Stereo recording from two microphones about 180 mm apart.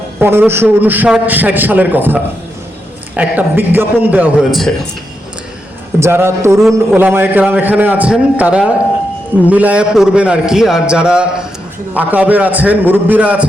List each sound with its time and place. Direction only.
0.2 s a man's voice: 15° right (ahead or behind)
3.2 s a man's voice: 10° right (ahead or behind)
6.0 s a man's voice: 15° right (ahead or behind)